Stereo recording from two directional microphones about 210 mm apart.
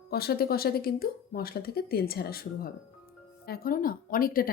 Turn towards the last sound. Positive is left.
turn(degrees=45)  # may be behind; listen again after turning